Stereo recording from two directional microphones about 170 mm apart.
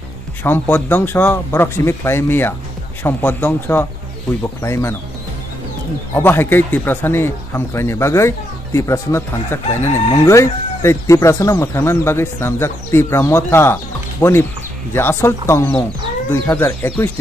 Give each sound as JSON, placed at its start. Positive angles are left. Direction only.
{"t": 0.4, "sound": "speech", "side_deg": 10}
{"t": 6.1, "sound": "speech", "side_deg": 10}